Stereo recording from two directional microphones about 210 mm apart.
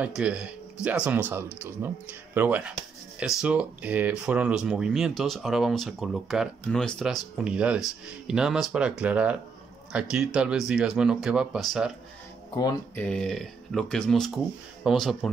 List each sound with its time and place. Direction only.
0.0 s speech: 5° right (ahead or behind)
12.9 s speech: 5° left (ahead or behind)